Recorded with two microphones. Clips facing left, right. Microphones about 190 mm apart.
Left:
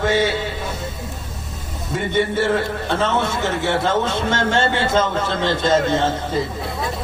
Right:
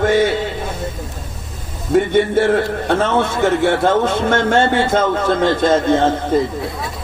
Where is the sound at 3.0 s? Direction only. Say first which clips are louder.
Right 3 dB; 55° right (ahead or behind).